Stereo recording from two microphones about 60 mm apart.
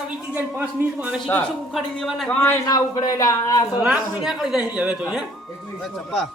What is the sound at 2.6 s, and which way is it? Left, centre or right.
Speech, left.